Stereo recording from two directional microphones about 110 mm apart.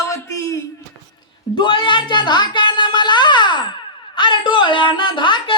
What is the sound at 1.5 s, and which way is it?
Speech, 45° left (ahead or behind).